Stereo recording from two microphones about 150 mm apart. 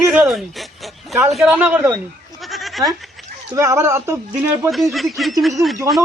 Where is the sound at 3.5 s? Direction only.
20° right (ahead or behind).